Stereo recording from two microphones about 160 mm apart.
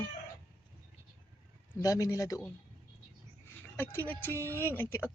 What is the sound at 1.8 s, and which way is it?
Speech, 20° left (ahead or behind).